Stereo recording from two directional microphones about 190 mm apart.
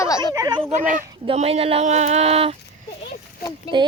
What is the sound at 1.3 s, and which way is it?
Speech, 30° right (ahead or behind).